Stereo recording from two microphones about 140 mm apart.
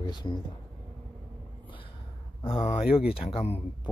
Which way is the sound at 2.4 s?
40° left (ahead or behind).